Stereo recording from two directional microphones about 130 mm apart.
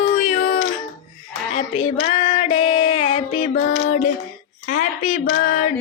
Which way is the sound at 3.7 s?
70° left (ahead or behind).